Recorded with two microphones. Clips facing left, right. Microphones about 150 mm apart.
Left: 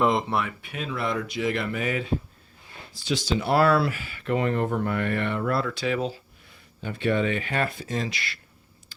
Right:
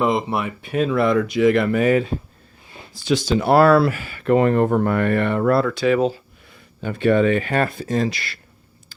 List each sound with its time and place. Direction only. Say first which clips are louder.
0.0 s speech: right 3 dB; 5° right (ahead or behind)
0.6 s speech: right 14 dB; 40° right (ahead or behind)
0.9 s speech: right 9 dB; 60° right (ahead or behind)
3.1 s speech: right 7 dB; 50° right (ahead or behind)
5.8 s speech: right 9 dB; 65° right (ahead or behind); by 8.3 s 40° right (ahead or behind)